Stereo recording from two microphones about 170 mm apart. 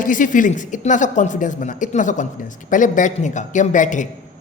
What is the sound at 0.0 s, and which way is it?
A woman's voice, 50° left (ahead or behind).